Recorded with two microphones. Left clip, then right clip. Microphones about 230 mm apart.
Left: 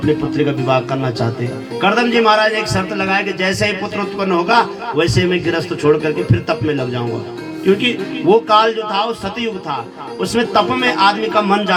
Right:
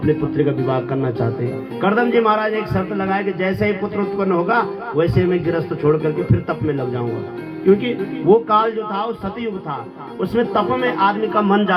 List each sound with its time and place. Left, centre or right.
0.0 s a man's voice: left